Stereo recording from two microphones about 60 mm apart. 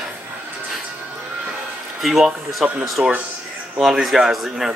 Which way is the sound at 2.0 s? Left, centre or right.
Centre.